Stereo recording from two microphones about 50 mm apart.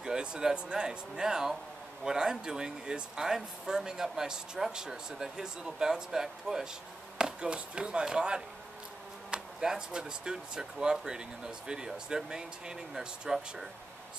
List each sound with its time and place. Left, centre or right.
0.0 s speech: centre
7.2 s chop: centre
9.3 s speech: centre